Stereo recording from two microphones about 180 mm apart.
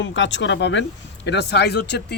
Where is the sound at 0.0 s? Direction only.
90° left.